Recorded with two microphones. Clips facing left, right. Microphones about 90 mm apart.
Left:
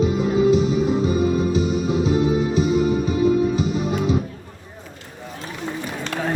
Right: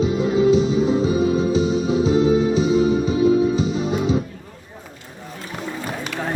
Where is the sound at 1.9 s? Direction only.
55° left (ahead or behind).